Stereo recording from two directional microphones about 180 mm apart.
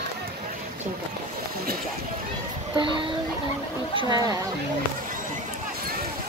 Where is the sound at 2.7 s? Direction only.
25° right (ahead or behind).